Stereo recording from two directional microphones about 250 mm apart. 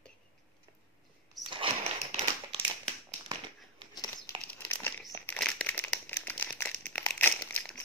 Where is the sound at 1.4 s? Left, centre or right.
Right.